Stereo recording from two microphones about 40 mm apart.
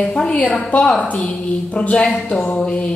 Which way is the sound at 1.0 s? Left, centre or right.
Left.